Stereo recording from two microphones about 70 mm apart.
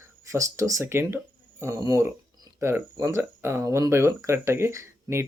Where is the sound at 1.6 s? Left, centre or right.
Right.